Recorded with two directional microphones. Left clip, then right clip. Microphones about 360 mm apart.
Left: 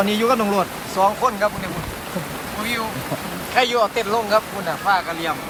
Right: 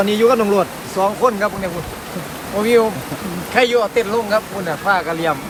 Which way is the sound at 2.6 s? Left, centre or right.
Centre.